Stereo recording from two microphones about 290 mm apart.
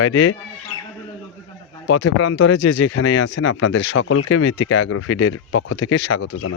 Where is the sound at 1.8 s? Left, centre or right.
Left.